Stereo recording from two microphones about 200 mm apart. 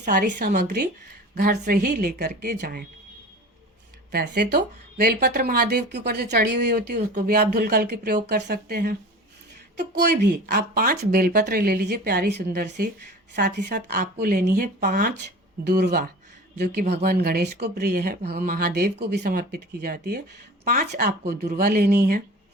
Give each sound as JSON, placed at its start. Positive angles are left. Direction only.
{"t": 0.0, "sound": "speech", "side_deg": -40}
{"t": 4.1, "sound": "speech", "side_deg": -50}
{"t": 10.0, "sound": "speech", "side_deg": -55}
{"t": 21.0, "sound": "speech", "side_deg": -50}